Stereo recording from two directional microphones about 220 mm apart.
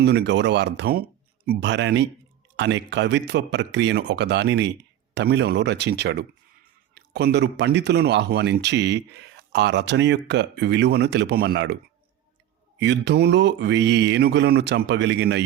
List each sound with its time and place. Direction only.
0.0 s speech: 50° right (ahead or behind)
12.8 s speech: 50° right (ahead or behind)